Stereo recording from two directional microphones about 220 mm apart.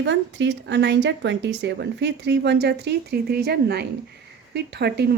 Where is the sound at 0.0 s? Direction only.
55° right (ahead or behind).